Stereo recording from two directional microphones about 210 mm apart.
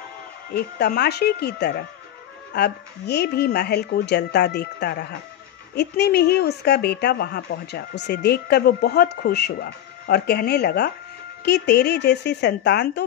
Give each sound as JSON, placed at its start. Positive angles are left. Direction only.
{"t": 0.5, "sound": "a woman's voice", "side_deg": 50}